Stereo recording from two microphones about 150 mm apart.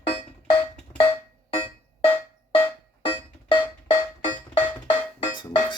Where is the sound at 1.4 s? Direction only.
40° left (ahead or behind).